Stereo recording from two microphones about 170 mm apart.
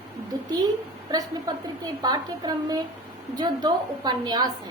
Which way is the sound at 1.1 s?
25° right (ahead or behind).